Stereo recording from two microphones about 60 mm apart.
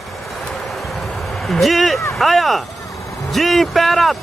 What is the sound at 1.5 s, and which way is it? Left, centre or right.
Speech, centre.